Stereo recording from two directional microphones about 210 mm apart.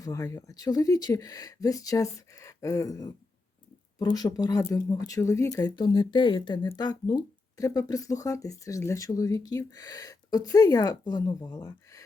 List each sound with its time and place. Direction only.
0.0 s speech: 15° left (ahead or behind)